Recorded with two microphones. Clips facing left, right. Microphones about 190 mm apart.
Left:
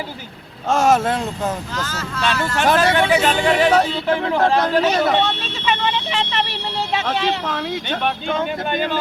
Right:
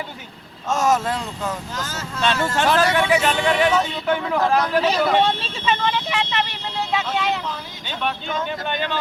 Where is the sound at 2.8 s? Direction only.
35° left (ahead or behind).